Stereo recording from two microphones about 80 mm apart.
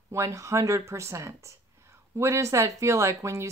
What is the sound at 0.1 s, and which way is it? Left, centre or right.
Speech, right.